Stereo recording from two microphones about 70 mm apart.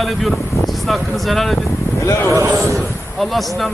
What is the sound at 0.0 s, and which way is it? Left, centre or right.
Speech, centre.